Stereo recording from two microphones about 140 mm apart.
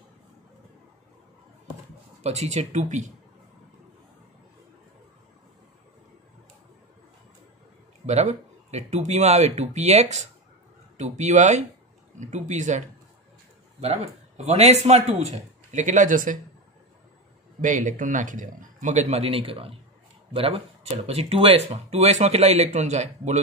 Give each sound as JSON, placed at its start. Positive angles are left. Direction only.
{"t": 2.2, "sound": "a man's voice", "side_deg": -50}
{"t": 8.1, "sound": "a man's voice", "side_deg": -50}
{"t": 13.7, "sound": "speech", "side_deg": -50}
{"t": 17.6, "sound": "a man's voice", "side_deg": -65}